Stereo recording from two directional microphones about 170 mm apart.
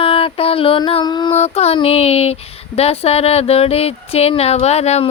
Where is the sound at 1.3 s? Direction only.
40° left (ahead or behind).